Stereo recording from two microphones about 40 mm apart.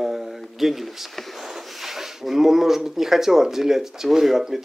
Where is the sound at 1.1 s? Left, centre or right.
Centre.